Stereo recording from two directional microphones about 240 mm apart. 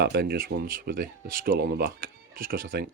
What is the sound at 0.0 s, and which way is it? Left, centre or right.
Speech, right.